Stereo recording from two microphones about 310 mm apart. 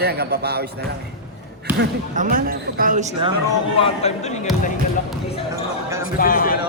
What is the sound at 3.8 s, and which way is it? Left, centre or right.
Speech, centre.